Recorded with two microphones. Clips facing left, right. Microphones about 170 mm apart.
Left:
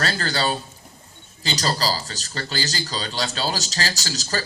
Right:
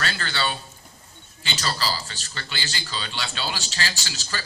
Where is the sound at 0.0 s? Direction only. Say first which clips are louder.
Left 4 dB; 40° left (ahead or behind).